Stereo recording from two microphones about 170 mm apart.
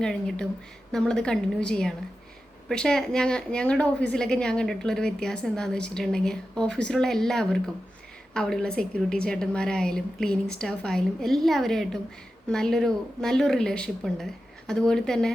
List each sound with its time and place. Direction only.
0.0 s a woman's voice: 5° left (ahead or behind)